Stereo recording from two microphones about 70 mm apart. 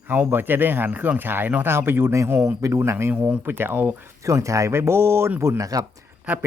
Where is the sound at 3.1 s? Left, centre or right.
Right.